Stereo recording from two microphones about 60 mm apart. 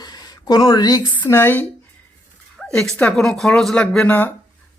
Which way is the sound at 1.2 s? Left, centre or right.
Left.